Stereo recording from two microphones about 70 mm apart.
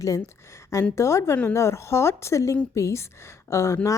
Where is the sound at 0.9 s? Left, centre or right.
Left.